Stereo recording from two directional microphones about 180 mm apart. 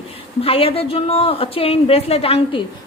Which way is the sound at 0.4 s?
30° left (ahead or behind).